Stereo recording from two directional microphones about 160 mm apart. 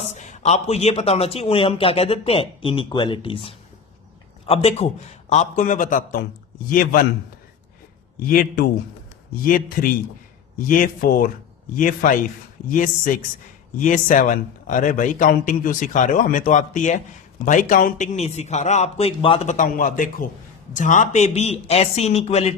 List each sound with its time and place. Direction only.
0.0 s a man's voice: 50° left (ahead or behind)
8.3 s a man's voice: 65° left (ahead or behind); by 22.5 s 40° left (ahead or behind)